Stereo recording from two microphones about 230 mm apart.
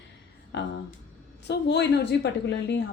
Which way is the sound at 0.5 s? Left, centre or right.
Left.